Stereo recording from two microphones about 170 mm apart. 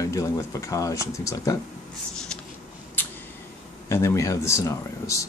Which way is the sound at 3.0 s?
10° left (ahead or behind).